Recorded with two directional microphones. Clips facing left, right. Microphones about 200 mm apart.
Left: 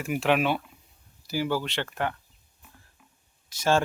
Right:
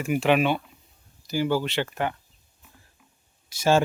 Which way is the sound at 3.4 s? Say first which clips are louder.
Right 3 dB; 10° right (ahead or behind).